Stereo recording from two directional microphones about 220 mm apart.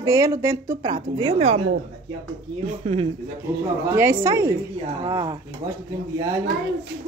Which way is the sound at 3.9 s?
15° right (ahead or behind).